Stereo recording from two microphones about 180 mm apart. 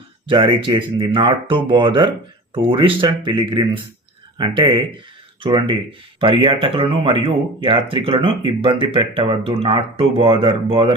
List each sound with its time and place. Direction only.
0.3 s speech: 30° right (ahead or behind)